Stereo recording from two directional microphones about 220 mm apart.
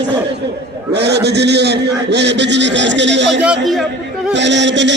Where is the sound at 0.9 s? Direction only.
50° right (ahead or behind).